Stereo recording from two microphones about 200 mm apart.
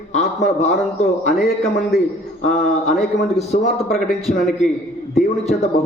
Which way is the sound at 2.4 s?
40° left (ahead or behind).